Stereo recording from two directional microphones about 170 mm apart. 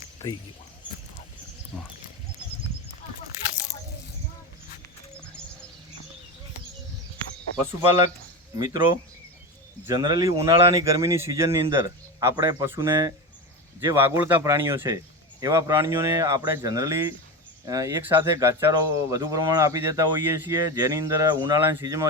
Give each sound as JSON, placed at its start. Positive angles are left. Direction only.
{"t": 1.7, "sound": "speech", "side_deg": -10}
{"t": 7.5, "sound": "speech", "side_deg": -20}